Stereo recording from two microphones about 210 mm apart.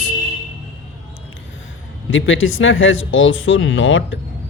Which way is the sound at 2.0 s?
65° left (ahead or behind).